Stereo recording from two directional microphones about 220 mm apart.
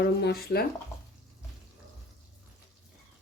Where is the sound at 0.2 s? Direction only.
50° left (ahead or behind).